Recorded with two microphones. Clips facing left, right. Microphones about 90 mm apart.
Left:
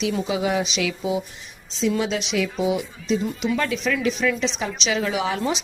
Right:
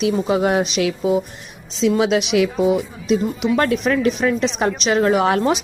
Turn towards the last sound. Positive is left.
turn(degrees=-55)  # may be behind; listen again after turning